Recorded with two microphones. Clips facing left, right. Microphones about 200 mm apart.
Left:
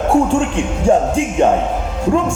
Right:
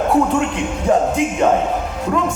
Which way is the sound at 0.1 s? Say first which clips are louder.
Left 5 dB; 30° left (ahead or behind).